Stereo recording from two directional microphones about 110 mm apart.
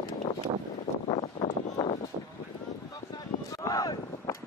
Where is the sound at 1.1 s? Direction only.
60° left (ahead or behind).